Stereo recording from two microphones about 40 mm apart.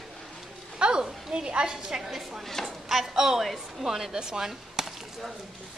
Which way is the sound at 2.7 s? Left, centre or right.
Centre.